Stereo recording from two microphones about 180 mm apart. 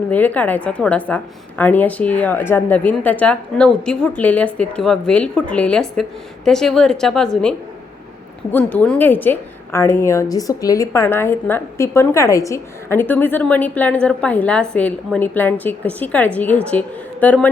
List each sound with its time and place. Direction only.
0.1 s a woman's voice: 10° left (ahead or behind)
8.5 s a woman's voice: 10° left (ahead or behind)